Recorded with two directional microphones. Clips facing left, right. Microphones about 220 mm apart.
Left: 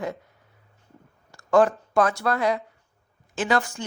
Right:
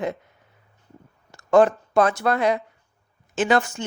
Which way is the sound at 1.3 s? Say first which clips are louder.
Right 3 dB; 20° right (ahead or behind).